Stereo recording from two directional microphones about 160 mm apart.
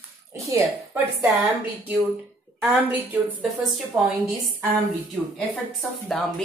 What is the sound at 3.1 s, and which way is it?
Speech, 10° right (ahead or behind).